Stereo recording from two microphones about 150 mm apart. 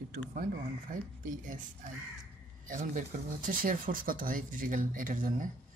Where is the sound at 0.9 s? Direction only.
60° right (ahead or behind).